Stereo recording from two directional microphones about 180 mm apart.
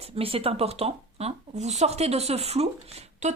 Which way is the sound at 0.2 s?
30° right (ahead or behind).